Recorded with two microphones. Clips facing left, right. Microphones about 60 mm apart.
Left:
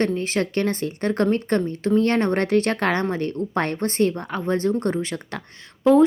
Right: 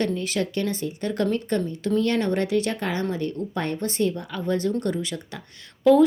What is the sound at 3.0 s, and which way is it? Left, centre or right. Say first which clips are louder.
A woman's voice: left 3 dB; left.